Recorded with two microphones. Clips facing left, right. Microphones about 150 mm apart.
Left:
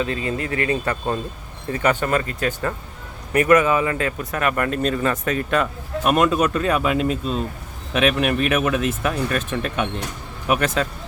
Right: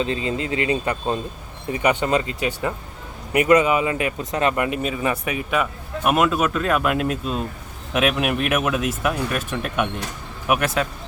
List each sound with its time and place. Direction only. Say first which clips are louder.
0.0 s speech: right 1 dB; 25° right (ahead or behind); by 10.8 s 10° right (ahead or behind)